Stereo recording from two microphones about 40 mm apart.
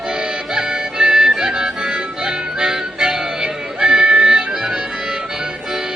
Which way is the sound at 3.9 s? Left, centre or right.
Right.